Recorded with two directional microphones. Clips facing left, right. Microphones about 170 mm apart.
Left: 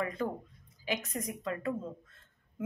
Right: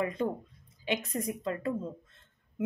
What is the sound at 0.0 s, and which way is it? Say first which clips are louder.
A woman's voice: right 3 dB; 25° right (ahead or behind).